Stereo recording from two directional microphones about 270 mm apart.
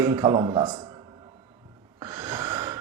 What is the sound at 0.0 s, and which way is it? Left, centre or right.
Speech, centre.